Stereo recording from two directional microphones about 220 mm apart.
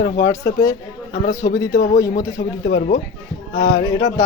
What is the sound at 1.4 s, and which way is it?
A man's voice, 45° left (ahead or behind).